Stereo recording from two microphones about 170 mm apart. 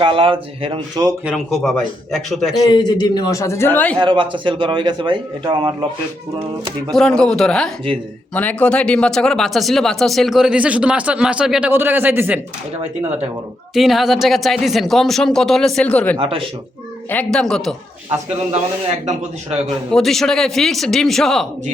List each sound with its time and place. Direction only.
0.0 s speech: 30° right (ahead or behind)
1.2 s speech: 5° right (ahead or behind)
2.6 s a man's voice: 25° left (ahead or behind); by 3.9 s 10° left (ahead or behind)
3.9 s a man's voice: 30° right (ahead or behind)
6.9 s speech: 5° left (ahead or behind); by 12.4 s 10° right (ahead or behind)
13.7 s speech: centre (ahead or behind)
16.2 s speech: 30° right (ahead or behind)
17.1 s speech: 5° left (ahead or behind)
19.0 s speech: 40° right (ahead or behind)
19.9 s speech: centre (ahead or behind)